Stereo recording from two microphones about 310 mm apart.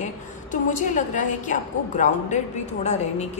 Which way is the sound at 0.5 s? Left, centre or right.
Left.